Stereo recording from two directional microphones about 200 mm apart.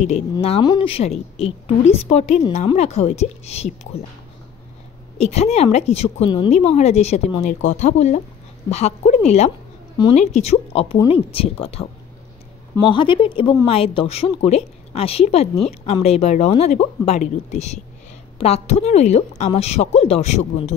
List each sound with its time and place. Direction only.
0.0 s a woman's voice: 35° left (ahead or behind)
5.1 s a woman's voice: 30° left (ahead or behind)
9.9 s a woman's voice: 25° left (ahead or behind)
10.2 s a woman's voice: 35° left (ahead or behind)
12.8 s a woman's voice: 25° left (ahead or behind)